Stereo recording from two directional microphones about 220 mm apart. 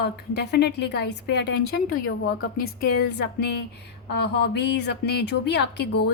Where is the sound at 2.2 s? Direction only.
60° left (ahead or behind).